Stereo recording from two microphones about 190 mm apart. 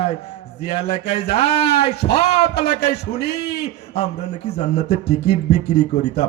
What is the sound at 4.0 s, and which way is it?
Speech, 35° left (ahead or behind).